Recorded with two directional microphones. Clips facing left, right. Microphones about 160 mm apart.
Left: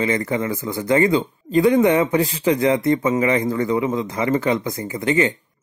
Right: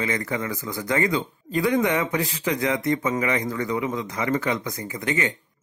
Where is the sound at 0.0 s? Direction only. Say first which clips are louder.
Left 6 dB; 25° left (ahead or behind).